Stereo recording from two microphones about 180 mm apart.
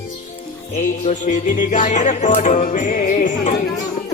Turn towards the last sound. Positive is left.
turn(degrees=45)  # may be behind; listen again after turning